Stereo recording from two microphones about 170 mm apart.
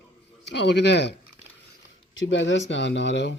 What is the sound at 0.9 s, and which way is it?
Speech, 90° left.